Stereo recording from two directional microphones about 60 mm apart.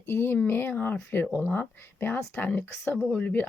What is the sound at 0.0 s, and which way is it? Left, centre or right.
Speech, left.